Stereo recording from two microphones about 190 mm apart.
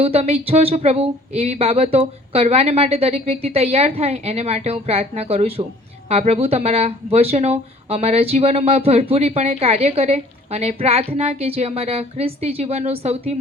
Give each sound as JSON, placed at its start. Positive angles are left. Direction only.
{"t": 0.0, "sound": "speech", "side_deg": -30}